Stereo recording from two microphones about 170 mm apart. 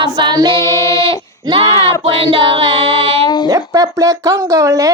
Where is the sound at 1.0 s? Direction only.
35° right (ahead or behind).